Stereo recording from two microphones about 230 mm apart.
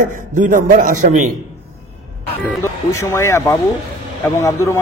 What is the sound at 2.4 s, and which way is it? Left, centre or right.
A man's voice, centre.